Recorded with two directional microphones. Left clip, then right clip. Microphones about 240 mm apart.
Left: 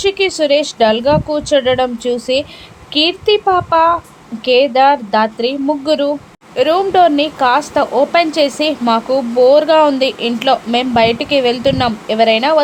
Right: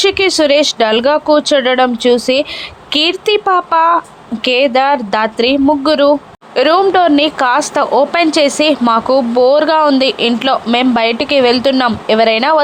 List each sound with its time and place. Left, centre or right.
0.0 s a woman's voice: centre